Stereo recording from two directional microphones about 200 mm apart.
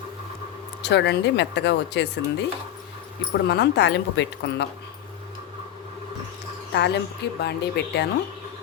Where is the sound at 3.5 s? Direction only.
60° left (ahead or behind).